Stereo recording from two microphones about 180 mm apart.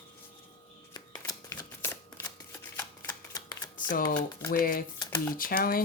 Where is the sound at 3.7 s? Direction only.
50° left (ahead or behind).